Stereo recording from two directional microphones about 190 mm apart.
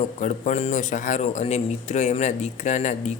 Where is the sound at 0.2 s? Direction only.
40° left (ahead or behind).